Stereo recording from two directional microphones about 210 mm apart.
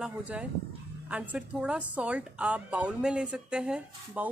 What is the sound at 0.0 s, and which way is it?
A woman's voice, 5° right (ahead or behind).